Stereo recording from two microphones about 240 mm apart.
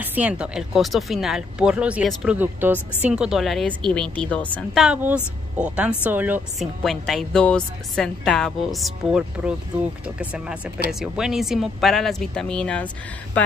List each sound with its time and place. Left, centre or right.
0.0 s a woman's voice: centre